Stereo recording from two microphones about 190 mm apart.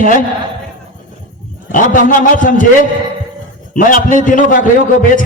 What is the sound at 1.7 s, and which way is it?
Speech, 45° left (ahead or behind).